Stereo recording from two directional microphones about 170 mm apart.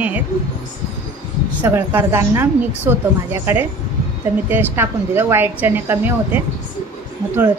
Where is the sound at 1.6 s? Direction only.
10° right (ahead or behind).